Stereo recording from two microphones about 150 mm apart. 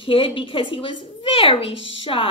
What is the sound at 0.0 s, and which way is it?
A woman's voice, 35° left (ahead or behind).